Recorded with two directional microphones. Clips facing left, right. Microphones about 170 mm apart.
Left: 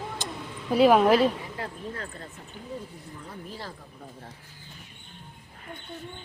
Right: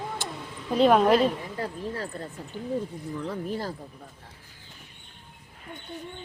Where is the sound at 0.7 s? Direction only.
5° left (ahead or behind).